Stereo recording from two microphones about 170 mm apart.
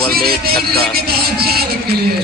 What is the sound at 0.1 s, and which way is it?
Speech, 65° right (ahead or behind).